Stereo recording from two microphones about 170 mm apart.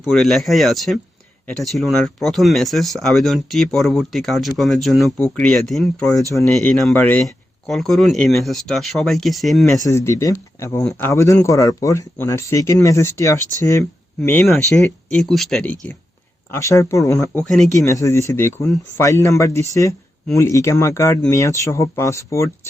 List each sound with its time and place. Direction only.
0.1 s speech: centre (ahead or behind)
9.8 s speech: 15° left (ahead or behind)
17.3 s speech: centre (ahead or behind)
17.7 s speech: 20° left (ahead or behind)